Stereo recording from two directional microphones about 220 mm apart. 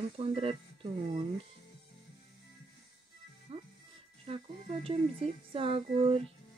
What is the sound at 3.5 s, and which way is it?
Music, 25° right (ahead or behind).